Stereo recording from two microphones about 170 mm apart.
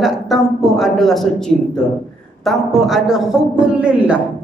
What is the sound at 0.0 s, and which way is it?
A man's voice, centre (ahead or behind).